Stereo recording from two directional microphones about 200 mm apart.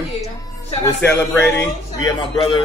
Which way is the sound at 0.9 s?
5° left (ahead or behind).